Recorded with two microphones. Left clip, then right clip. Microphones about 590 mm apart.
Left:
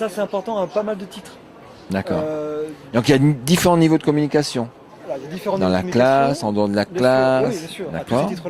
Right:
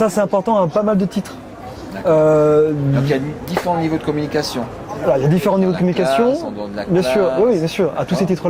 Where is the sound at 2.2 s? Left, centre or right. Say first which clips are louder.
Right 13 dB; right.